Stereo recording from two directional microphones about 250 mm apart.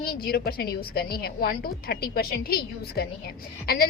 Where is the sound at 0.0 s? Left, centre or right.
Left.